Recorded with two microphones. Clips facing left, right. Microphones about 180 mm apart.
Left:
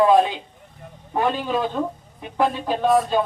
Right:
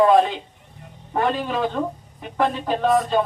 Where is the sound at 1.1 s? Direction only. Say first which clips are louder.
Even; centre (ahead or behind).